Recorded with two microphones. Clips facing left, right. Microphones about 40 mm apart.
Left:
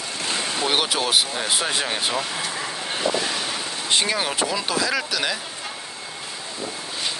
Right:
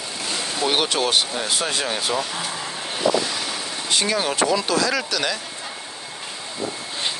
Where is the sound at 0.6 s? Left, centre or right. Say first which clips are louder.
Right 2 dB; centre.